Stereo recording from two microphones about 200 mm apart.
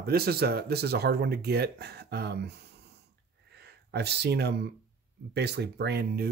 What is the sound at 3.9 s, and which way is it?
Speech, 55° right (ahead or behind).